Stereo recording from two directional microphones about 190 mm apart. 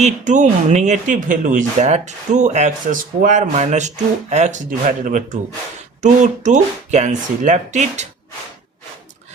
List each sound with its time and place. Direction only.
0.0 s speech: 40° right (ahead or behind)